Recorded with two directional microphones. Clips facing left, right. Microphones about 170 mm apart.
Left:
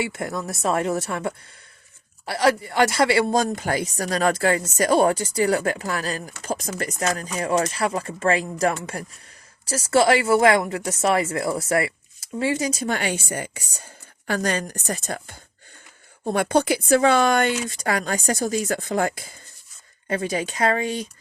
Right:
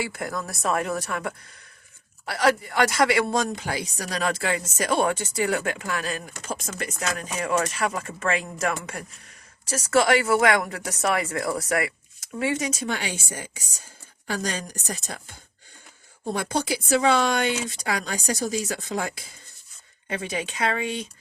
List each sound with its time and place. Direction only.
0.0 s speech: 25° left (ahead or behind)
3.5 s speech: 45° left (ahead or behind); by 12.7 s 30° left (ahead or behind)
12.8 s a woman's voice: 50° left (ahead or behind)
16.2 s a woman's voice: 60° left (ahead or behind)
20.1 s speech: 40° left (ahead or behind)